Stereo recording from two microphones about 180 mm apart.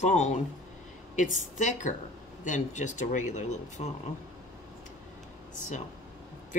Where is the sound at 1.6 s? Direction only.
45° left (ahead or behind).